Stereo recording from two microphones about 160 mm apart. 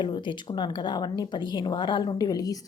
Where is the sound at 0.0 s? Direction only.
30° left (ahead or behind).